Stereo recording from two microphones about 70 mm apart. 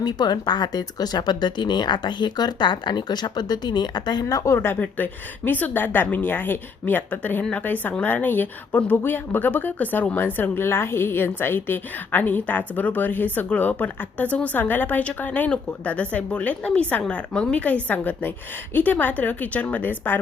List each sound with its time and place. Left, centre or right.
0.0 s speech: left
4.5 s a woman's voice: left